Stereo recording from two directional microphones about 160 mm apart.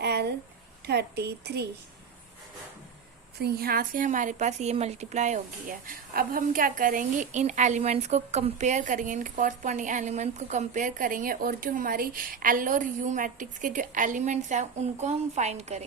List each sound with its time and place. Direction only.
0.0 s a sound: 90° right
0.9 s a woman's voice: 90° right
3.4 s a woman's voice: 70° right (ahead or behind); by 15.8 s 45° right (ahead or behind)